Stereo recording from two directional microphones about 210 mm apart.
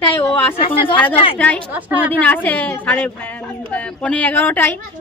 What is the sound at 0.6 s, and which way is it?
Speech, 25° left (ahead or behind).